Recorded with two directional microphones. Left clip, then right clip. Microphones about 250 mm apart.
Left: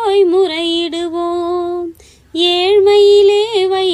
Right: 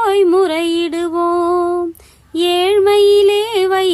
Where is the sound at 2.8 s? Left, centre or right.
Right.